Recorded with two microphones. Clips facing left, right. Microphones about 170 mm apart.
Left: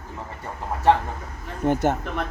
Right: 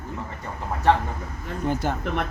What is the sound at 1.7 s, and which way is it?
Speech, 55° left (ahead or behind).